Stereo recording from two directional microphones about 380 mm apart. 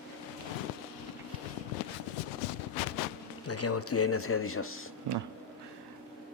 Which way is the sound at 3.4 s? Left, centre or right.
Left.